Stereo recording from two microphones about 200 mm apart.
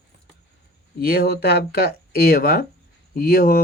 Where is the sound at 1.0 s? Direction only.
50° left (ahead or behind).